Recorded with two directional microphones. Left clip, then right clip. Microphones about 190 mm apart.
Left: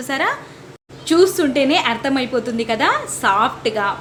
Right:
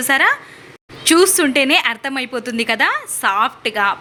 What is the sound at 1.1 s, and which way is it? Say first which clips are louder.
A woman's voice: right 2 dB; 20° right (ahead or behind).